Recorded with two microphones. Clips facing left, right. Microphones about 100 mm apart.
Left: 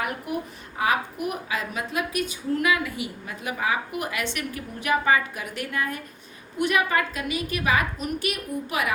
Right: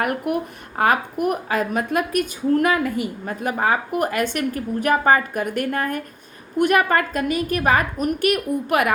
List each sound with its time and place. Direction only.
0.0 s a woman's voice: 55° right (ahead or behind)